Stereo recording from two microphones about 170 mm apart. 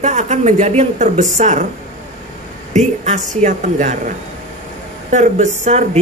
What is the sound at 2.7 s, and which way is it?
Speech, 45° right (ahead or behind).